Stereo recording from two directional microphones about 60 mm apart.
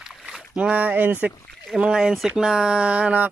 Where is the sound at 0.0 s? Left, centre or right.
Centre.